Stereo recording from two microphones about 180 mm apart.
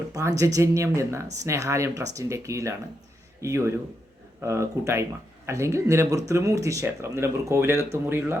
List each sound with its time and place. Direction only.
0.1 s speech: 20° right (ahead or behind)